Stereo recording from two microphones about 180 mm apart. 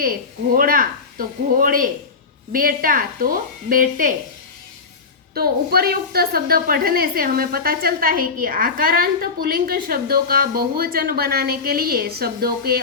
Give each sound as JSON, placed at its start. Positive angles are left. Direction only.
{"t": 0.0, "sound": "speech", "side_deg": -55}
{"t": 5.3, "sound": "a woman's voice", "side_deg": -55}